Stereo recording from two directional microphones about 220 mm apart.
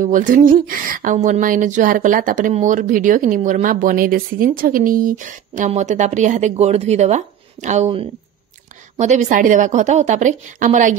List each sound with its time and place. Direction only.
0.0 s speech: 35° right (ahead or behind)